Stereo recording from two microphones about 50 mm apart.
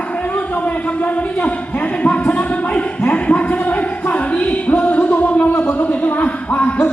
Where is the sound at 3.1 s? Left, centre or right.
Left.